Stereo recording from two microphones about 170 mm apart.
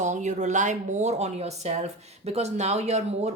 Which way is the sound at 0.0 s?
45° right (ahead or behind).